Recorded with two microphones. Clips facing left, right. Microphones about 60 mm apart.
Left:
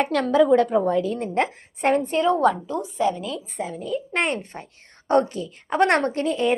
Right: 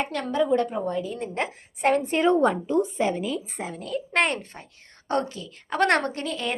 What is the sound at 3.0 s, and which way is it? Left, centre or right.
Speech, centre.